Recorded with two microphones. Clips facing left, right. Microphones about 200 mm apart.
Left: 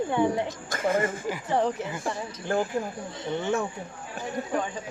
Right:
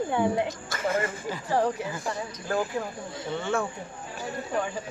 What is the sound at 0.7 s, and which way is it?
Speech, 50° left (ahead or behind).